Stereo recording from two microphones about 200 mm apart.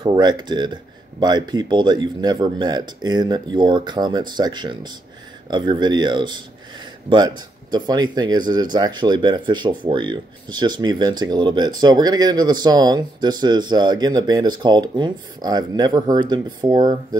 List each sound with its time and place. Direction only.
0.0 s speech: 20° right (ahead or behind)